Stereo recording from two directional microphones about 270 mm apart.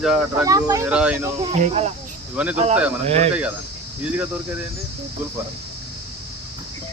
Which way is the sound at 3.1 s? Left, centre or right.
Right.